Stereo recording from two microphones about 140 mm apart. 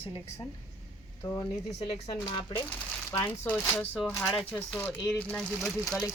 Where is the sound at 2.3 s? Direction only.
35° left (ahead or behind).